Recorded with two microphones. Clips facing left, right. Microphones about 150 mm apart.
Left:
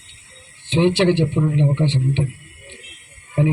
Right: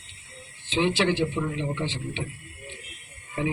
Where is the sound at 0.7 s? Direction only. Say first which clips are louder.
Left 8 dB; 60° left (ahead or behind).